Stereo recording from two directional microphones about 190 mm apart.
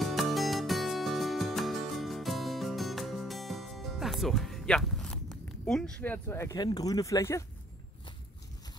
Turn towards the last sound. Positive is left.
turn(degrees=15)  # may be behind; listen again after turning